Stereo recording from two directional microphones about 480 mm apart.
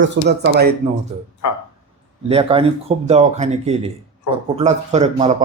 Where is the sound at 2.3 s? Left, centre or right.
Centre.